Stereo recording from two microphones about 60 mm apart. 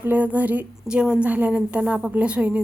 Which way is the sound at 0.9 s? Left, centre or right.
Centre.